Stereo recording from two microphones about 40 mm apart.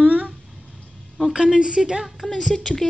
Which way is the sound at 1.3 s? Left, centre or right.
Right.